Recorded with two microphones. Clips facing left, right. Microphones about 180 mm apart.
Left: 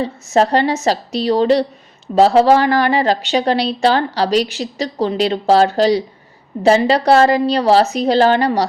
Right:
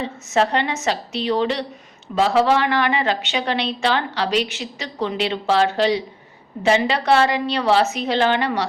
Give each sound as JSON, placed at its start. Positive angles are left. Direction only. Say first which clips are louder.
{"t": 0.0, "sound": "a woman's voice", "louder": "left 5 dB", "side_deg": 35}